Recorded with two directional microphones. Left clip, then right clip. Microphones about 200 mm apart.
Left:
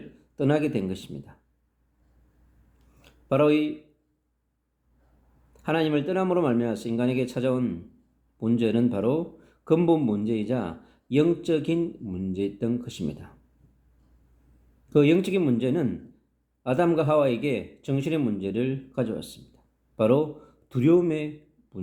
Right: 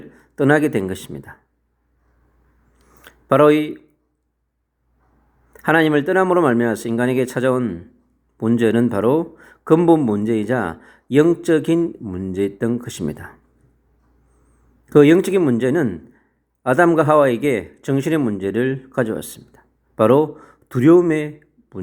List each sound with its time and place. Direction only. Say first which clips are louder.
0.3 s speech: right 9 dB; 30° right (ahead or behind)
2.7 s a sound: right 12 dB; 30° right (ahead or behind)
5.6 s speech: right 10 dB; 30° right (ahead or behind)
14.8 s speech: right 9 dB; 30° right (ahead or behind)